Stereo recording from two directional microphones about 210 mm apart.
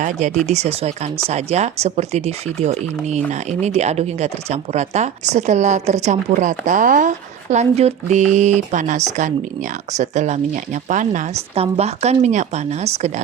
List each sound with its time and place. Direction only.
0.0 s speech: 35° right (ahead or behind)